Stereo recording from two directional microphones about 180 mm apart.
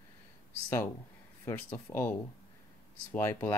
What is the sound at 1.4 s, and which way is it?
Speech, 15° left (ahead or behind).